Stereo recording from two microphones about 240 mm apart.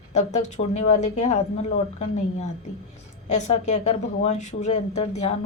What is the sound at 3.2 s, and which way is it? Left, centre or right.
Speech, left.